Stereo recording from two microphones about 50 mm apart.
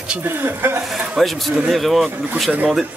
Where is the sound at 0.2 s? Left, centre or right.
Right.